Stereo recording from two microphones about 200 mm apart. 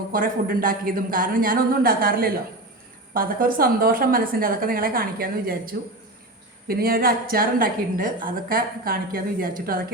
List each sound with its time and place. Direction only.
0.1 s a woman's voice: 45° right (ahead or behind)